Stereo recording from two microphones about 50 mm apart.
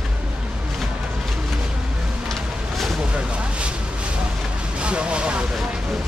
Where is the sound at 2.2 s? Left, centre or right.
Centre.